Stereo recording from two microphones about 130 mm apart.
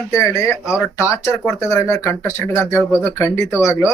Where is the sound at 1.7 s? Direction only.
20° left (ahead or behind).